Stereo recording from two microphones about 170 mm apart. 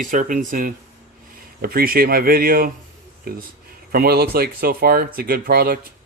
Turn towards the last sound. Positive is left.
turn(degrees=-60)  # may be behind; listen again after turning